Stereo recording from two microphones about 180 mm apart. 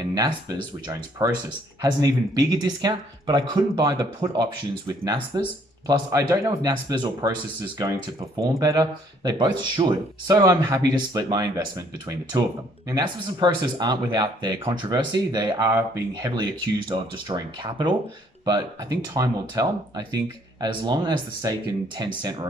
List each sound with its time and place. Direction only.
0.1 s speech: 20° right (ahead or behind)
19.1 s speech: 20° right (ahead or behind)